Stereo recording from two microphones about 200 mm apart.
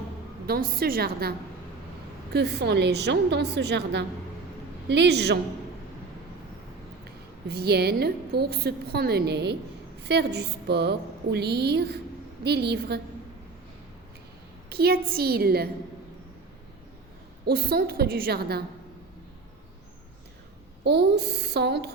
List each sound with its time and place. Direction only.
0.4 s a woman's voice: 50° right (ahead or behind)
7.4 s a woman's voice: 55° right (ahead or behind)
14.7 s a woman's voice: 50° right (ahead or behind)
17.4 s a woman's voice: 50° right (ahead or behind)
20.8 s a woman's voice: 55° right (ahead or behind)